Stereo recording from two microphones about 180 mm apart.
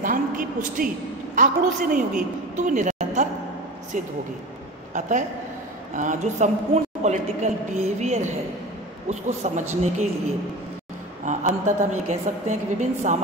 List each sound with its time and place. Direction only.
0.0 s a woman's voice: 50° right (ahead or behind)
5.9 s a woman's voice: 45° right (ahead or behind)
11.2 s a woman's voice: 45° right (ahead or behind)